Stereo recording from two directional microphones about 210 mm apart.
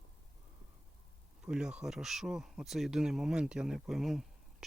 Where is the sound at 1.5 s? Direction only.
5° right (ahead or behind).